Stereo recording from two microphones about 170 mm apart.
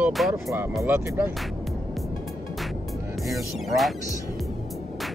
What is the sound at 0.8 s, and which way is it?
Speech, 15° right (ahead or behind).